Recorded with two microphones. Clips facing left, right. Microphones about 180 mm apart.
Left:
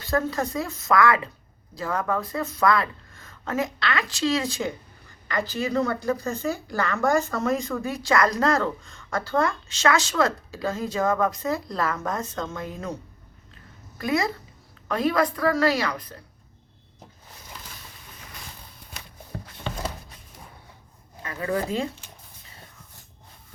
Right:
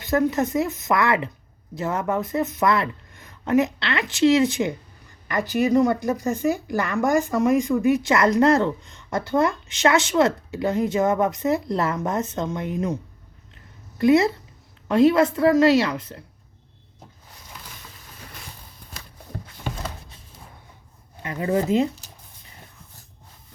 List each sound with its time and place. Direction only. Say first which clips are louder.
0.0 s speech: right 4 dB; 20° right (ahead or behind)
14.0 s speech: right 8 dB; 25° right (ahead or behind)
21.2 s speech: right 4 dB; 25° right (ahead or behind)